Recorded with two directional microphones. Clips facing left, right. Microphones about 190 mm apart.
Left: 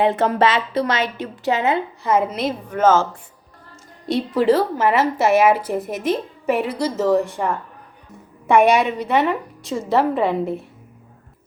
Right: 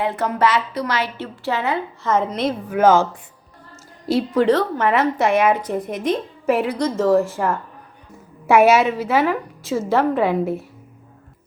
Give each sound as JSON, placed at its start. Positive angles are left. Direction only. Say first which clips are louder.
{"t": 0.0, "sound": "a woman's voice", "louder": "left 3 dB", "side_deg": 25}
{"t": 2.1, "sound": "a woman's voice", "louder": "even", "side_deg": 5}
{"t": 2.7, "sound": "speech", "louder": "right 1 dB", "side_deg": -15}
{"t": 4.0, "sound": "a woman's voice", "louder": "right 1 dB", "side_deg": 0}